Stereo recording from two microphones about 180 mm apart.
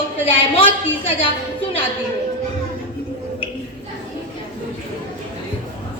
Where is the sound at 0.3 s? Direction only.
30° left (ahead or behind).